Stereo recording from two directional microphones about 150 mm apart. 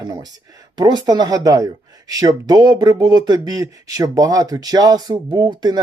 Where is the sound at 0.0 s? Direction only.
30° right (ahead or behind).